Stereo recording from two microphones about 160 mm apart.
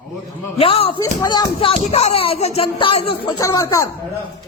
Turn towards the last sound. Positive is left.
turn(degrees=20)  # may be behind; listen again after turning